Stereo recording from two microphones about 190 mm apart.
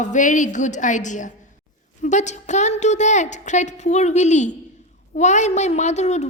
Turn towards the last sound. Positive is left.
turn(degrees=35)  # may be behind; listen again after turning